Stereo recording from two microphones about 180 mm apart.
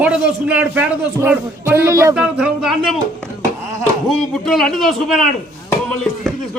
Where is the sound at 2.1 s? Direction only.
5° right (ahead or behind).